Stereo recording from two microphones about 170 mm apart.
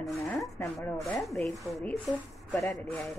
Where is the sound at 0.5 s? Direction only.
15° left (ahead or behind).